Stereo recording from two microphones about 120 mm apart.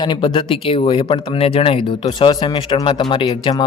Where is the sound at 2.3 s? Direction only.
35° left (ahead or behind).